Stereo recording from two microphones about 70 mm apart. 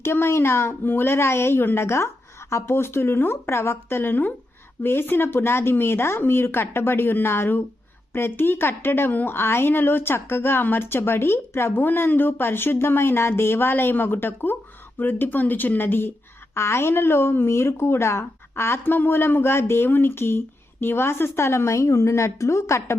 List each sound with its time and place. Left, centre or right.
0.0 s a woman's voice: left